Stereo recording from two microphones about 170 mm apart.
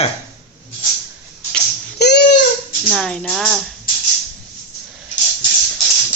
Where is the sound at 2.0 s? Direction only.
85° left.